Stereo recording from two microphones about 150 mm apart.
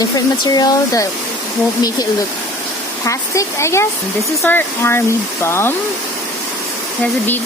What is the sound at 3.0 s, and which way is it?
Speech, 20° left (ahead or behind).